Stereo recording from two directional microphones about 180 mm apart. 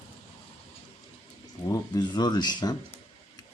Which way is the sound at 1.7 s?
25° left (ahead or behind).